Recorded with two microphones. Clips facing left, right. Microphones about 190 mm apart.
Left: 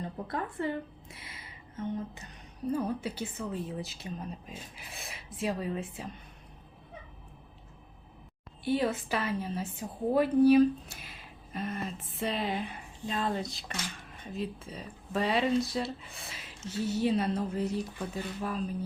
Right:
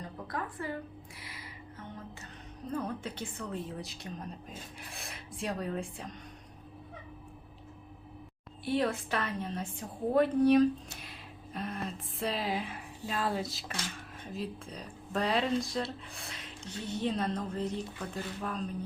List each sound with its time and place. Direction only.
0.3 s speech: 25° left (ahead or behind)
2.6 s a woman's voice: 10° left (ahead or behind)
8.6 s a woman's voice: centre (ahead or behind)